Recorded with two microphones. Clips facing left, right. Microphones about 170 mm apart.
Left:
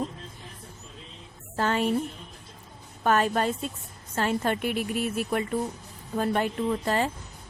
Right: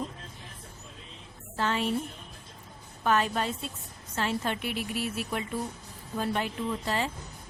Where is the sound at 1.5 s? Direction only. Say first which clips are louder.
Left 4 dB; 45° left (ahead or behind).